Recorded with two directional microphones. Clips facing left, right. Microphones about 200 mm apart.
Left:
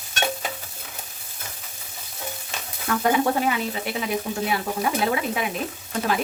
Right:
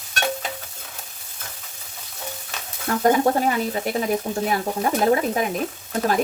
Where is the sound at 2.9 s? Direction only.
40° right (ahead or behind).